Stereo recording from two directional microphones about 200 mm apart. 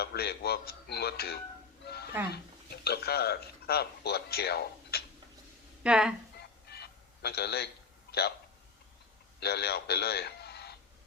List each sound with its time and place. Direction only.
0.0 s speech: 50° left (ahead or behind)
1.8 s a sound: 55° left (ahead or behind)
2.8 s speech: 55° left (ahead or behind)
5.8 s speech: 5° right (ahead or behind)
6.4 s fowl: 55° left (ahead or behind)
8.1 s a sound: 50° left (ahead or behind)
9.4 s a man's voice: 55° left (ahead or behind)